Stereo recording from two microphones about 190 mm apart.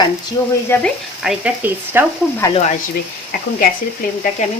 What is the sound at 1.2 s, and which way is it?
Speech, 10° right (ahead or behind).